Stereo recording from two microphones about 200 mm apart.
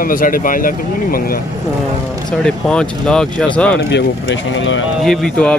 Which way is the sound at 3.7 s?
60° left (ahead or behind).